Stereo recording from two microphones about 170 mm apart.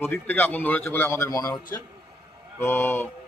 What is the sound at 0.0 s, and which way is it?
Speech, 10° left (ahead or behind).